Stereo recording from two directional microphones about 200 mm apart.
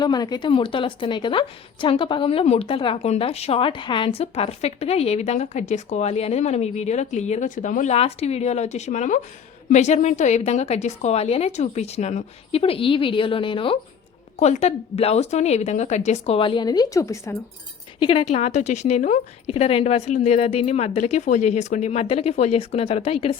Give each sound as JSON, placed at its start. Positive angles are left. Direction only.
{"t": 0.0, "sound": "a woman's voice", "side_deg": 20}
{"t": 18.0, "sound": "a woman's voice", "side_deg": 25}